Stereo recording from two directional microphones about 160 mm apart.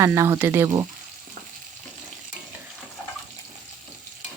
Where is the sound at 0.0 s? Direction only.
15° right (ahead or behind).